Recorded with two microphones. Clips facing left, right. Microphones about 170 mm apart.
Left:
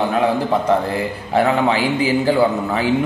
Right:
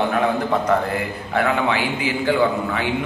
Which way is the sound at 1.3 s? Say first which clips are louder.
Left 4 dB; 35° left (ahead or behind).